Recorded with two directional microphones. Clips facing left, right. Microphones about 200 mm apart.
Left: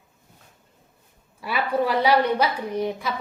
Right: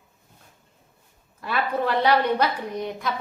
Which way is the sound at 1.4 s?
10° left (ahead or behind).